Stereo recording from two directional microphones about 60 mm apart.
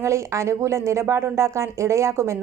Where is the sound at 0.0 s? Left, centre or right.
Right.